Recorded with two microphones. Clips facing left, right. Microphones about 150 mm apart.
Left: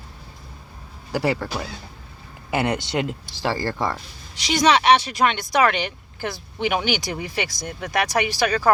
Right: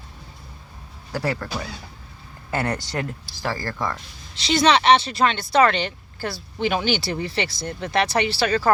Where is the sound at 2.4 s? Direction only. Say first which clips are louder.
Left 3 dB; 15° left (ahead or behind).